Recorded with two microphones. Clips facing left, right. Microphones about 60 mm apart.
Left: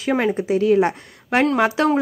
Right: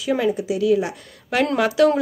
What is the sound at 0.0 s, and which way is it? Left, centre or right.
A woman's voice, left.